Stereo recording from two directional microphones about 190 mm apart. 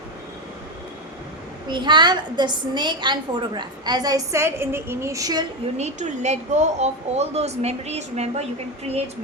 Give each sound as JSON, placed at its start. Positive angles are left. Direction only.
{"t": 1.6, "sound": "a woman's voice", "side_deg": -25}
{"t": 5.7, "sound": "a woman's voice", "side_deg": -35}